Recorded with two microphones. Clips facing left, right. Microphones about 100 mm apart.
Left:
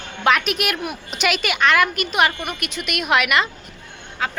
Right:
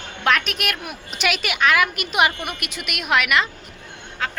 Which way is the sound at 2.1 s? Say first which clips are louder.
Even; 15° right (ahead or behind).